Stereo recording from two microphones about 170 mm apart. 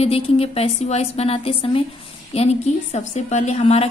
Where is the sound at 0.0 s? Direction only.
35° left (ahead or behind).